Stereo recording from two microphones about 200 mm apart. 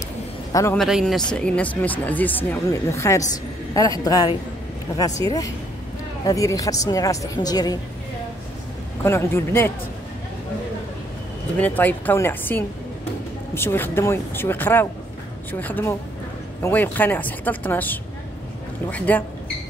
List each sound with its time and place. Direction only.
0.5 s a man's voice: 15° left (ahead or behind)
0.7 s speech: centre (ahead or behind); by 5.0 s 15° left (ahead or behind)
6.2 s speech: 15° left (ahead or behind)
9.0 s speech: 10° left (ahead or behind)
11.5 s speech: 10° left (ahead or behind)